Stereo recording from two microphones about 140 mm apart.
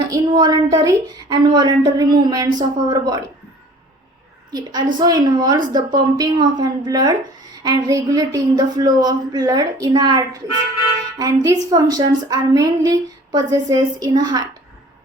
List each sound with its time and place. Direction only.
0.1 s a woman's voice: 25° right (ahead or behind)
4.5 s a woman's voice: 30° right (ahead or behind)